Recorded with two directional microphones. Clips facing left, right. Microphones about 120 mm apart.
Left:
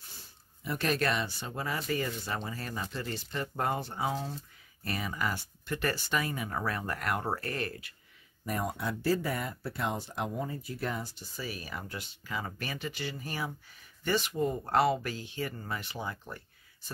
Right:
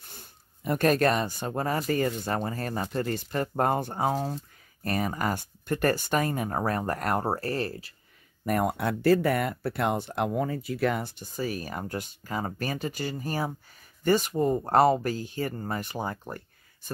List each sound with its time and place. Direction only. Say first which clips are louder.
0.1 s speech: right 5 dB; 55° right (ahead or behind); by 7.9 s 35° right (ahead or behind)
8.5 s speech: right 7 dB; 60° right (ahead or behind)